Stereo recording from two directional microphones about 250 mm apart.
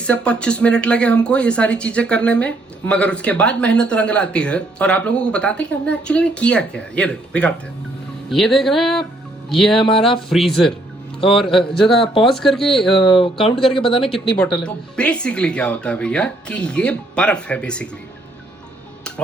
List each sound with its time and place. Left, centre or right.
0.0 s speech: centre
13.2 s speech: left
14.3 s speech: centre